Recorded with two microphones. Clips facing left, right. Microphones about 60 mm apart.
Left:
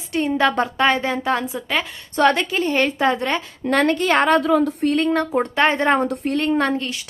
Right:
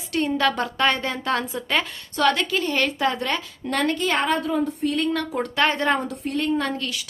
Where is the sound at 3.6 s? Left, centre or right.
Left.